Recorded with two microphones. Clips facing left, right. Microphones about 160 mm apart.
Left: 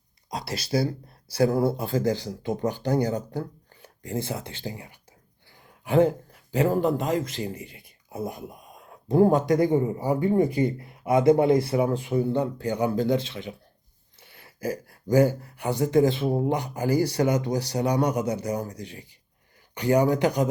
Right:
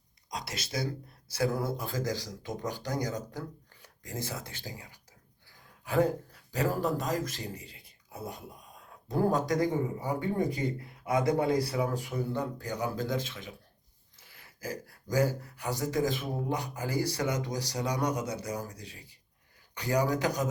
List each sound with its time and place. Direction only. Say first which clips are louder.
0.3 s speech: left 9 dB; 35° left (ahead or behind)
7.6 s speech: left 9 dB; 30° right (ahead or behind)
9.0 s speech: left 8 dB; 25° left (ahead or behind)
19.8 s speech: left 7 dB; 30° left (ahead or behind)